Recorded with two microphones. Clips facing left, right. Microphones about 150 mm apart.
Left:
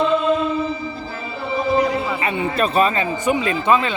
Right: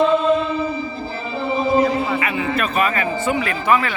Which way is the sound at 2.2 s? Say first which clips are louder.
Left 1 dB; 30° left (ahead or behind).